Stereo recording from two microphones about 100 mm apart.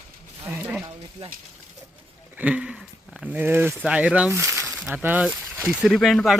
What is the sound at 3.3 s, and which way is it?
Speech, 20° right (ahead or behind).